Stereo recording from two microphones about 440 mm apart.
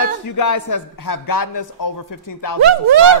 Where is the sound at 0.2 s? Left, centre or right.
Left.